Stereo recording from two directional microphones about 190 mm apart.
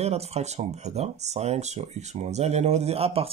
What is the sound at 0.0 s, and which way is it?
Speech, 35° right (ahead or behind).